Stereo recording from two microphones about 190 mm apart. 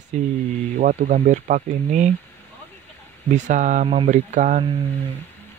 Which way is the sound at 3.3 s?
40° right (ahead or behind).